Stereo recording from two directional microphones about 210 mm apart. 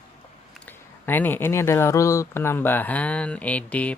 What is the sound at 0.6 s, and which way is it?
Speech, 10° left (ahead or behind).